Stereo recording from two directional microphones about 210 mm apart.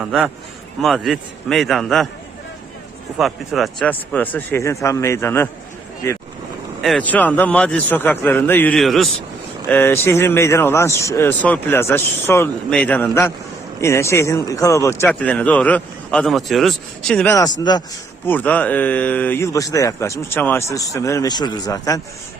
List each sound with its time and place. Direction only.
0.0 s a man's voice: 5° right (ahead or behind)
3.2 s speech: centre (ahead or behind)
17.6 s speech: 20° left (ahead or behind)
18.3 s speech: 5° left (ahead or behind)